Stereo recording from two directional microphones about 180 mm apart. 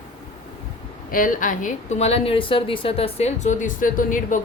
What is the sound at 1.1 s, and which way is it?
A woman's voice, 50° left (ahead or behind).